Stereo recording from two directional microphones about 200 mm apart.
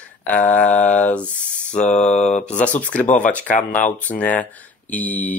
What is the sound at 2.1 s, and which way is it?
Mantra, 35° left (ahead or behind).